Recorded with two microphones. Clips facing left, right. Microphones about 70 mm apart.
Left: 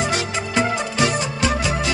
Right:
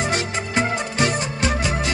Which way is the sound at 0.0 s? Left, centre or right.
Right.